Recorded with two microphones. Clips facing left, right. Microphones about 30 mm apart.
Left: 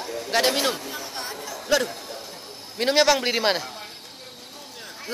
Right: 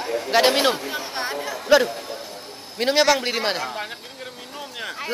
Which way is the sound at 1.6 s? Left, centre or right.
Centre.